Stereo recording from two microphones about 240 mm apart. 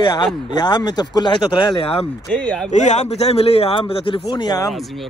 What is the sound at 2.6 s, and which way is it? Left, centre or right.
Speech, left.